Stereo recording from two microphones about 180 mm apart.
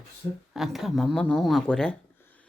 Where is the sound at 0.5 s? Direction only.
Centre (ahead or behind).